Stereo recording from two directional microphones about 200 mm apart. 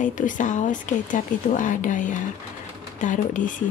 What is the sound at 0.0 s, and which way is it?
Speech, 40° left (ahead or behind).